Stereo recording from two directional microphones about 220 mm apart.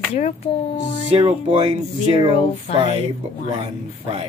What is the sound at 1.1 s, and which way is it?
Speech, 25° right (ahead or behind).